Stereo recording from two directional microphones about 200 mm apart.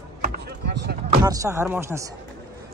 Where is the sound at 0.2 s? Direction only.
55° right (ahead or behind).